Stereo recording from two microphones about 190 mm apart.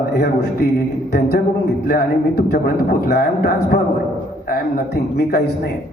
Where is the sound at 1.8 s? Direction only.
55° left (ahead or behind).